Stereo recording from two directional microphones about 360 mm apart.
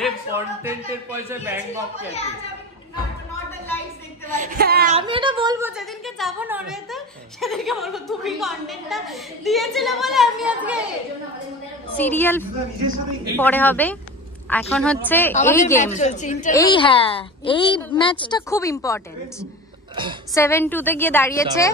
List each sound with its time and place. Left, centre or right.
0.0 s a man's voice: centre
2.0 s a woman's voice: centre
3.4 s a sound: centre
4.4 s a woman's voice: right; by 10.8 s centre
12.0 s a woman's voice: centre
15.6 s a woman's voice: centre
20.0 s a man's voice: centre
20.3 s a woman's voice: centre